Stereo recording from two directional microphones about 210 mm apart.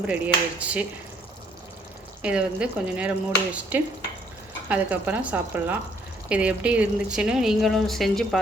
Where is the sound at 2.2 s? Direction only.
5° right (ahead or behind).